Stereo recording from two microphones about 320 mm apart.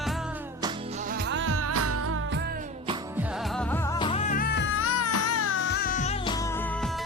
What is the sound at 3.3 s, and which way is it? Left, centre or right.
Music, centre.